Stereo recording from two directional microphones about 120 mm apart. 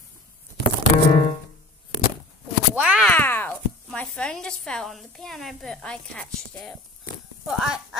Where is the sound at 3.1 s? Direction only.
15° left (ahead or behind).